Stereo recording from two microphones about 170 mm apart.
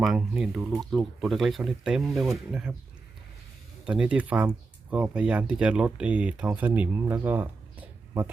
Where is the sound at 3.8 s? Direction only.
5° right (ahead or behind).